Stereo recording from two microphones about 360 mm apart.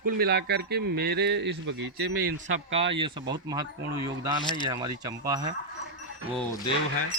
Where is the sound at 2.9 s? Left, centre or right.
Centre.